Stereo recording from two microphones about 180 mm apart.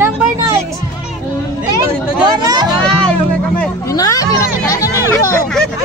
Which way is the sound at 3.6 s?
20° left (ahead or behind).